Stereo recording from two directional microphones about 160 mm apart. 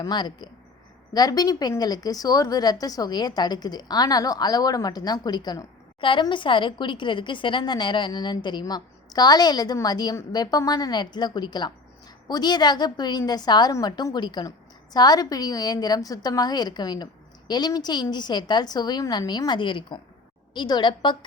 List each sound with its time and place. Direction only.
0.0 s a woman's voice: 25° left (ahead or behind)